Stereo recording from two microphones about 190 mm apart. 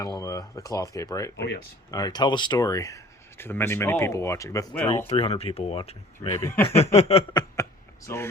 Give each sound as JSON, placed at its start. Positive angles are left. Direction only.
{"t": 0.0, "sound": "speech", "side_deg": 20}
{"t": 5.0, "sound": "speech", "side_deg": 30}
{"t": 6.1, "sound": "speech", "side_deg": 15}
{"t": 6.7, "sound": "speech", "side_deg": 35}
{"t": 7.5, "sound": "a sound", "side_deg": 15}